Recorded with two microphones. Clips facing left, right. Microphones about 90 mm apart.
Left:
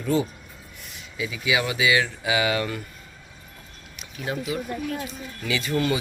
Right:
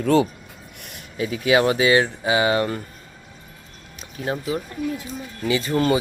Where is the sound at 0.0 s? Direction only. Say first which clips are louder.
Right 6 dB; 75° right (ahead or behind).